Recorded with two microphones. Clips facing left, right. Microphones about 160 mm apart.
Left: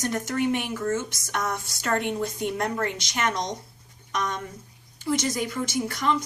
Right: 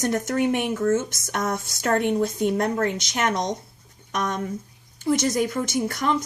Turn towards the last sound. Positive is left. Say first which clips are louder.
# right 2 dB
turn(degrees=-50)  # may be behind; listen again after turning